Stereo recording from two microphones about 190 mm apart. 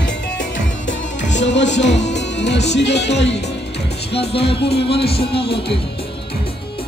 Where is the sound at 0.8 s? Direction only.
70° left (ahead or behind).